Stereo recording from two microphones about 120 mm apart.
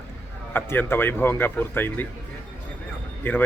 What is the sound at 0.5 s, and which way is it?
A man's voice, 20° left (ahead or behind).